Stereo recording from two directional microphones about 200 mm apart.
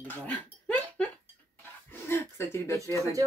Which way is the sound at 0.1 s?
10° left (ahead or behind).